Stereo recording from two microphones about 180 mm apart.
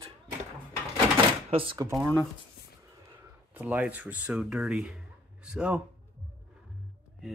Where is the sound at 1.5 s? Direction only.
30° right (ahead or behind).